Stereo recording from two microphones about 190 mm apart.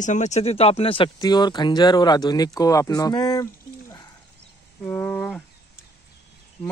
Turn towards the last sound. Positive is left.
turn(degrees=5)  # may be behind; listen again after turning